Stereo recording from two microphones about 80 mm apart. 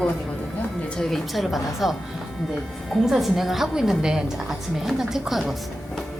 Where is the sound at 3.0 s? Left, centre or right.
Centre.